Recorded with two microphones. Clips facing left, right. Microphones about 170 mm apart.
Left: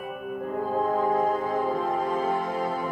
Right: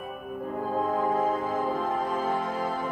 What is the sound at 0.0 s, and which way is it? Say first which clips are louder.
Music: left 3 dB; 5° left (ahead or behind).